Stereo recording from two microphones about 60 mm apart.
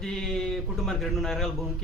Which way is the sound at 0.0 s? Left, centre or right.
Centre.